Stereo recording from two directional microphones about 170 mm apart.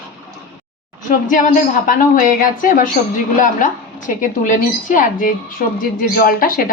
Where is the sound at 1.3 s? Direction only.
50° left (ahead or behind).